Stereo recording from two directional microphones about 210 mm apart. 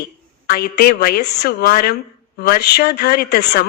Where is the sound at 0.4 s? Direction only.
45° left (ahead or behind).